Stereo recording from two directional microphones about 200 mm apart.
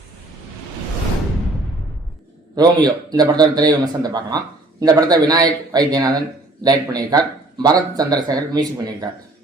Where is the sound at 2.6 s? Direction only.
20° right (ahead or behind).